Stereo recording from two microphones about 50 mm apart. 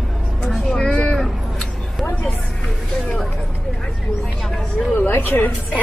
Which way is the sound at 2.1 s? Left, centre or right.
Left.